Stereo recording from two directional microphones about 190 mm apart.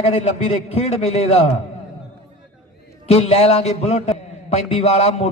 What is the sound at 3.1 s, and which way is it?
A man's voice, 35° left (ahead or behind).